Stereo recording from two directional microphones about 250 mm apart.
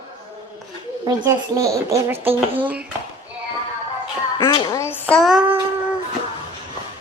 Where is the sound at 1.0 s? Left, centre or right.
Centre.